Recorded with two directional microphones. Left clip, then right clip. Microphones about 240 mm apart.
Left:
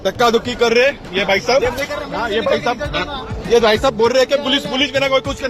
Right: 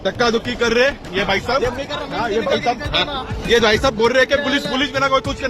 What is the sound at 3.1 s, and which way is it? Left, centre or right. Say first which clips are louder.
Speech: left 2 dB; centre.